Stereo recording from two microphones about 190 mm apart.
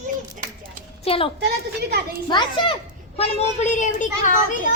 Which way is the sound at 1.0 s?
30° left (ahead or behind).